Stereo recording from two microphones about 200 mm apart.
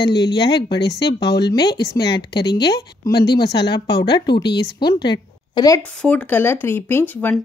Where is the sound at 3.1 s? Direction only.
50° left (ahead or behind).